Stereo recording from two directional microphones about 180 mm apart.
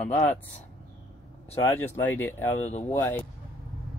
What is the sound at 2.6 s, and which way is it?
Speech, 40° left (ahead or behind).